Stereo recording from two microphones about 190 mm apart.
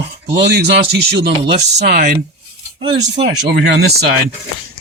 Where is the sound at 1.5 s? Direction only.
35° right (ahead or behind).